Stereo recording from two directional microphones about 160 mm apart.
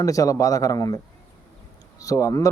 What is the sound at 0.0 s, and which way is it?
Speech, 20° left (ahead or behind).